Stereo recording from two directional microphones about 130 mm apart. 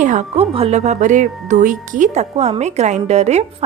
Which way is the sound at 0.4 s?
50° right (ahead or behind).